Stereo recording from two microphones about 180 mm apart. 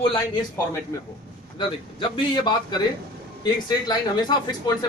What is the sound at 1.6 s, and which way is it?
Speech, 25° left (ahead or behind).